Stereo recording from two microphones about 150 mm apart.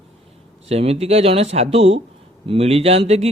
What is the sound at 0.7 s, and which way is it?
Speech, 45° right (ahead or behind).